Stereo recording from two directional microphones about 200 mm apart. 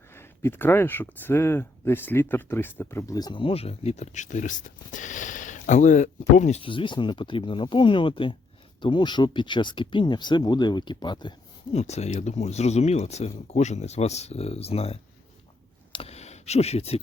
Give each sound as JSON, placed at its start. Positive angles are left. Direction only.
{"t": 0.1, "sound": "speech", "side_deg": 10}
{"t": 11.8, "sound": "speech", "side_deg": 35}
{"t": 15.9, "sound": "a sound", "side_deg": 30}